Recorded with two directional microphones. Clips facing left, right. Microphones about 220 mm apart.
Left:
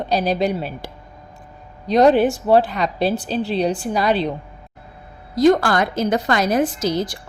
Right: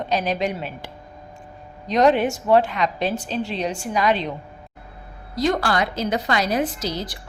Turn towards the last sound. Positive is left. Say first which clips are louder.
# left 6 dB
turn(degrees=45)  # may be behind; listen again after turning